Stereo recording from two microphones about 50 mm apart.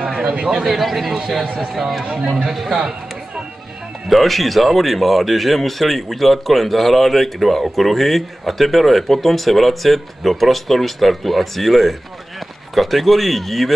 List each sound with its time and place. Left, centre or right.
0.0 s a sound: centre
0.4 s speech: centre
0.7 s a man's voice: centre
2.0 s a man's voice: centre
2.5 s speech: centre
4.1 s speech: centre